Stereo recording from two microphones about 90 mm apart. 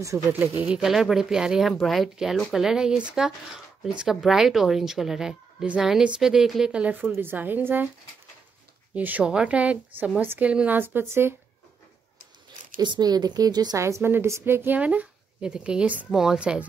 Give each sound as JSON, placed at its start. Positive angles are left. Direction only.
{"t": 0.3, "sound": "a woman's voice", "side_deg": -20}
{"t": 8.9, "sound": "a woman's voice", "side_deg": -15}
{"t": 12.7, "sound": "a woman's voice", "side_deg": -60}
{"t": 13.7, "sound": "a woman's voice", "side_deg": -35}